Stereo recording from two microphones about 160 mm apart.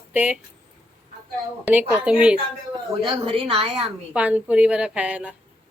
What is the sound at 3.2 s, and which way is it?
Speech, 35° right (ahead or behind).